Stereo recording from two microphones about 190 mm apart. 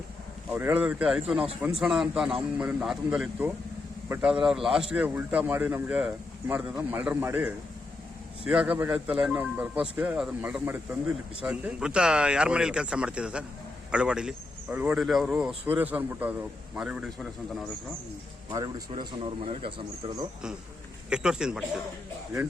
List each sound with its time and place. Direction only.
0.5 s a man's voice: 10° right (ahead or behind)
18.5 s speech: 25° right (ahead or behind)
21.1 s speech: 5° right (ahead or behind)